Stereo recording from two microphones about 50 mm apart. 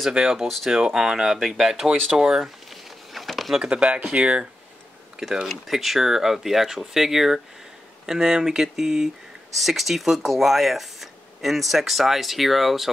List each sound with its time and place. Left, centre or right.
0.0 s speech: centre
2.7 s a sound: centre
3.5 s speech: centre
5.3 s speech: centre